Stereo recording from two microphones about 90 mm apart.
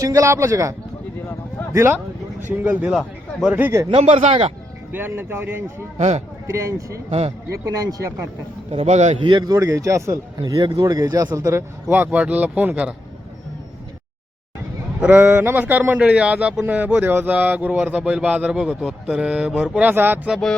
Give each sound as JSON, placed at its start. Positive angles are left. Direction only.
{"t": 0.0, "sound": "speech", "side_deg": -35}
{"t": 1.7, "sound": "a sound", "side_deg": -30}
{"t": 2.5, "sound": "speech", "side_deg": -20}
{"t": 2.9, "sound": "speech", "side_deg": 0}
{"t": 3.8, "sound": "speech", "side_deg": -85}
{"t": 4.9, "sound": "a sound", "side_deg": -25}
{"t": 6.5, "sound": "speech", "side_deg": -35}
{"t": 8.7, "sound": "speech", "side_deg": -75}
{"t": 9.5, "sound": "speech", "side_deg": -40}
{"t": 10.4, "sound": "speech", "side_deg": -50}
{"t": 15.0, "sound": "a sound", "side_deg": -20}
{"t": 16.0, "sound": "speech", "side_deg": -10}
{"t": 18.8, "sound": "speech", "side_deg": -5}
{"t": 19.7, "sound": "a sound", "side_deg": -20}